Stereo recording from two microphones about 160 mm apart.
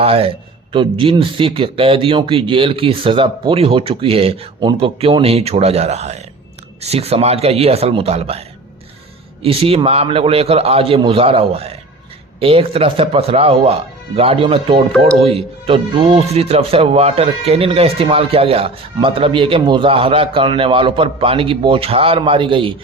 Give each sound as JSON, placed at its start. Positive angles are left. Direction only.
{"t": 0.0, "sound": "speech", "side_deg": -35}